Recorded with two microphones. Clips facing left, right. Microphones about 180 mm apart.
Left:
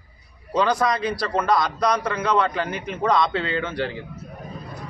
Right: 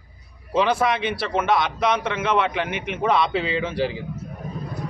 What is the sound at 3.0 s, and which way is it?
Speech, 5° right (ahead or behind).